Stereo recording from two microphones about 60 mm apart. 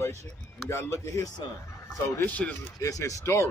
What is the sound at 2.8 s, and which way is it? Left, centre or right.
Speech, left.